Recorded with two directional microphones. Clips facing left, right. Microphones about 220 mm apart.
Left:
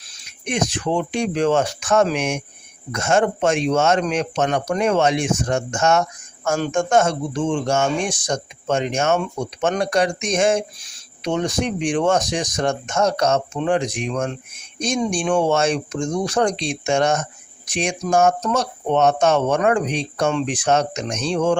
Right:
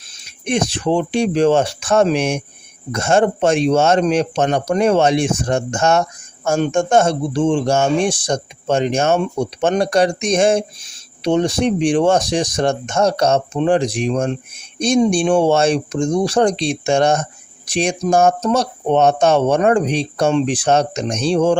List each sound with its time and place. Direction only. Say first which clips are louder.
0.3 s speech: right 4 dB; 30° right (ahead or behind)